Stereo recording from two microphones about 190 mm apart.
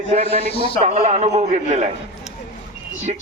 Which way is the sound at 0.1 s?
35° right (ahead or behind).